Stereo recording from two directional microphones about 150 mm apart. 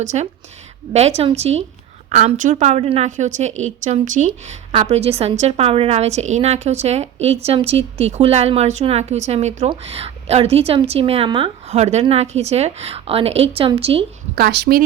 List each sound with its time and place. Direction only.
0.0 s a woman's voice: 50° right (ahead or behind)
4.7 s a woman's voice: 40° right (ahead or behind)
11.8 s a woman's voice: 50° right (ahead or behind)
14.3 s a woman's voice: 90° right